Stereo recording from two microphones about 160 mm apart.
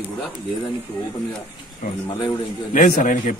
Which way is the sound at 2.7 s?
55° left (ahead or behind).